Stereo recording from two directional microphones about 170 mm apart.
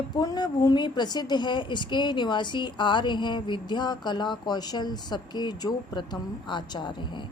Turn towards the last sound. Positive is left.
turn(degrees=25)  # may be behind; listen again after turning